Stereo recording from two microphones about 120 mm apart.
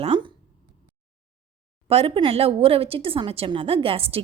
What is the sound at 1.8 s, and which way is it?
A woman's voice, 55° right (ahead or behind).